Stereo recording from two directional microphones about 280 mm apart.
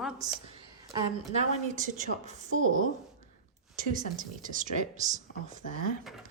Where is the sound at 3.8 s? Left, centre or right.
Right.